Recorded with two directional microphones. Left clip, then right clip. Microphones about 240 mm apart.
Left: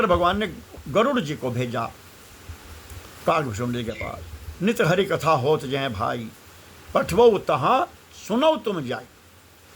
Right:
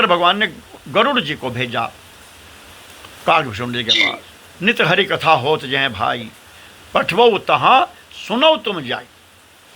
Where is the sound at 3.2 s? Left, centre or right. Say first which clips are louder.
Right 7 dB; centre.